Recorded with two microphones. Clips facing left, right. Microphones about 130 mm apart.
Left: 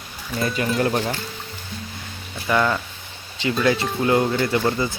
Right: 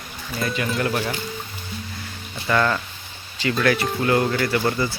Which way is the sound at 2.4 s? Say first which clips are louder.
Even; 10° left (ahead or behind).